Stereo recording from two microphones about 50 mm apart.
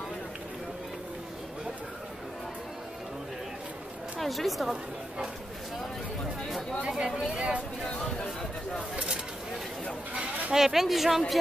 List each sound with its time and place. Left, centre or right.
4.2 s speech: centre
7.2 s speech: right
8.9 s a sound: centre
10.5 s speech: centre